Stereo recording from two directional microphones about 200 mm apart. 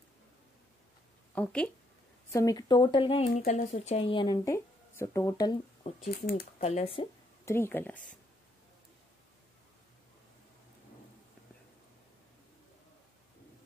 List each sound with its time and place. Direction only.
1.3 s speech: 5° left (ahead or behind)
2.3 s speech: 20° left (ahead or behind)
6.0 s speech: 50° left (ahead or behind)
6.6 s speech: 30° left (ahead or behind)
7.4 s speech: 10° left (ahead or behind)